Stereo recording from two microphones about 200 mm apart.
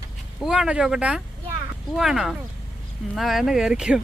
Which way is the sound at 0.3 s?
Centre (ahead or behind).